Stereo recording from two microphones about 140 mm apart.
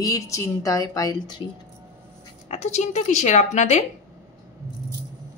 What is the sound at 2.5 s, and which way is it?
Speech, 55° left (ahead or behind).